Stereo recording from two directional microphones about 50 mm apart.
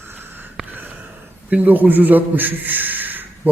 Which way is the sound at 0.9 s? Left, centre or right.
Right.